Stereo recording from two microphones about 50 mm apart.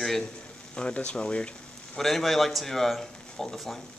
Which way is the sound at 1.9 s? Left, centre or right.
Centre.